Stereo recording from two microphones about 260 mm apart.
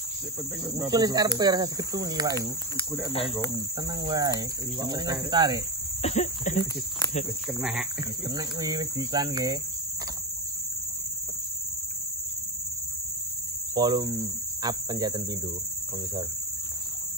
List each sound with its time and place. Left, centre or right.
0.7 s speech: centre
3.1 s speech: left
3.5 s speech: centre
6.0 s speech: left
7.4 s speech: centre
8.0 s speech: centre
13.7 s speech: centre